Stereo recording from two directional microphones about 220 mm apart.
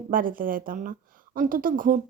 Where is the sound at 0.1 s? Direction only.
40° right (ahead or behind).